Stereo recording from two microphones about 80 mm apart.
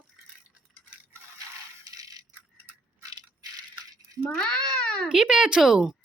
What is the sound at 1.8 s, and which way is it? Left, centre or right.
Coin, right.